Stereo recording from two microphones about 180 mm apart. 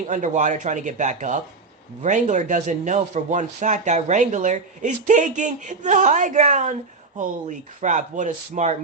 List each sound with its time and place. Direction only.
0.1 s speech: 45° right (ahead or behind)
7.8 s speech: 45° right (ahead or behind)